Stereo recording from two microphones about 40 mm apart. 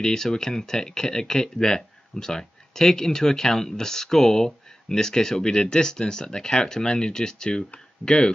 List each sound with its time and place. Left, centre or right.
0.0 s speech: centre